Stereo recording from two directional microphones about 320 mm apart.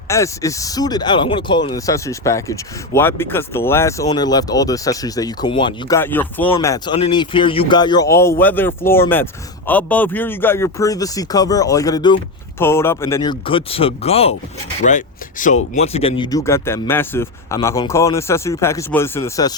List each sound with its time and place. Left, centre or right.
0.1 s speech: centre